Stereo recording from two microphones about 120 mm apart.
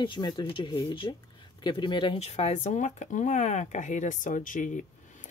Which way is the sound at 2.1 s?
60° left (ahead or behind).